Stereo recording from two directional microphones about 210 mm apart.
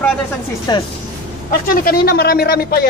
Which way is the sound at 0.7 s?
20° left (ahead or behind).